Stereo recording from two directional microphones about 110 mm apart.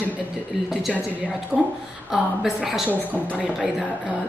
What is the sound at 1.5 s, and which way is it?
Speech, 15° right (ahead or behind).